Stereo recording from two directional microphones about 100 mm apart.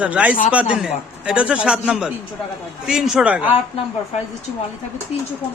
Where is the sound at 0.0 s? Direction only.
15° right (ahead or behind).